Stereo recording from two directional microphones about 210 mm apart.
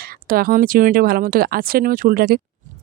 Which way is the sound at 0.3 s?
45° right (ahead or behind).